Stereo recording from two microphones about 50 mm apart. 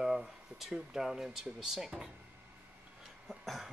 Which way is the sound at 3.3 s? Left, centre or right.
Centre.